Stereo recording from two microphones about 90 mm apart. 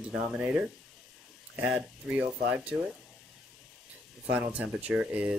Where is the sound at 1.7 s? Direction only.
10° right (ahead or behind).